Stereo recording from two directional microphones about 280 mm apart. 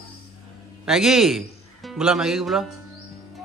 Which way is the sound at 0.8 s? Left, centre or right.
Centre.